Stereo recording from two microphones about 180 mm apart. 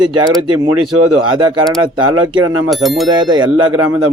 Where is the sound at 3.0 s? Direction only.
25° right (ahead or behind).